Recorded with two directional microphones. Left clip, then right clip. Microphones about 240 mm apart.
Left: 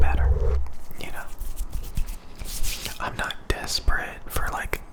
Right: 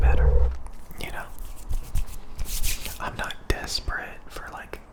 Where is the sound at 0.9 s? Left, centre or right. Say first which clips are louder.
Right 2 dB; centre.